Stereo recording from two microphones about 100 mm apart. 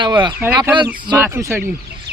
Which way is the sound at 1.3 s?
30° right (ahead or behind).